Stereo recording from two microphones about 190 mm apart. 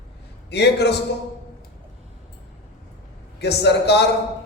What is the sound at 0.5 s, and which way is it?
Speech, 60° left (ahead or behind).